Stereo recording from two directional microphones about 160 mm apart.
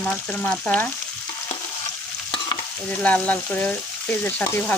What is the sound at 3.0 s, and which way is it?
Speech, 10° left (ahead or behind).